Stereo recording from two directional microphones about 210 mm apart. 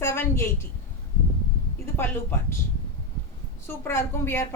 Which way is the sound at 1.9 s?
10° left (ahead or behind).